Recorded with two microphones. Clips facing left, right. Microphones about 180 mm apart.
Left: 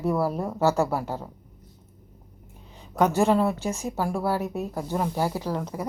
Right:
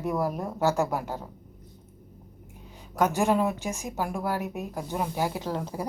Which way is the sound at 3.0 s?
15° right (ahead or behind).